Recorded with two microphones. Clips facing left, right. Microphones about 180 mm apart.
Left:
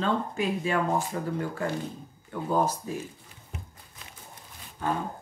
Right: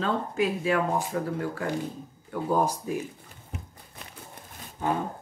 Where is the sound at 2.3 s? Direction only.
10° right (ahead or behind).